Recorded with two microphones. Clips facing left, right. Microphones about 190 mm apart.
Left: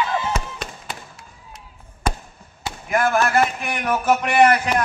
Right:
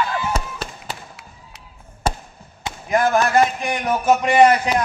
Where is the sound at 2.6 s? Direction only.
20° right (ahead or behind).